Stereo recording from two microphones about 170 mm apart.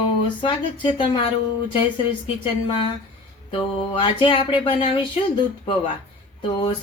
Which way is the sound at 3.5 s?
30° left (ahead or behind).